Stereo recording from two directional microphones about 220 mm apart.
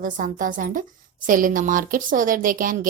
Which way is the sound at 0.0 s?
35° right (ahead or behind).